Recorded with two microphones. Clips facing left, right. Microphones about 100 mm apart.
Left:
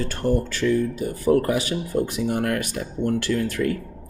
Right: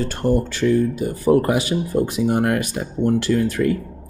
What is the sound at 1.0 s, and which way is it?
Speech, 25° right (ahead or behind).